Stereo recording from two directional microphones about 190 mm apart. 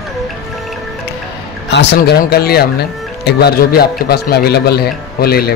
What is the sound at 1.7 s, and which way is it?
A man's voice, 60° left (ahead or behind).